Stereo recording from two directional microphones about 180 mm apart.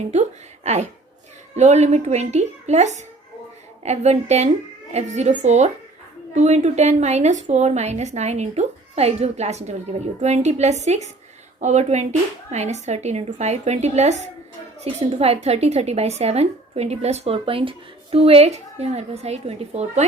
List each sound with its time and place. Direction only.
0.1 s a woman's voice: 40° right (ahead or behind)